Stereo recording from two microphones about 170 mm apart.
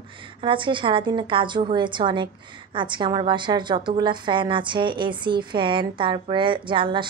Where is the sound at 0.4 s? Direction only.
30° right (ahead or behind).